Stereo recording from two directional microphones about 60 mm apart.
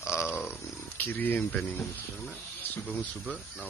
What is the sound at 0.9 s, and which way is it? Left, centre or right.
Speech, left.